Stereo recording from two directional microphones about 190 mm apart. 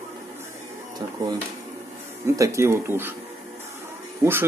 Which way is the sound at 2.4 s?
15° right (ahead or behind).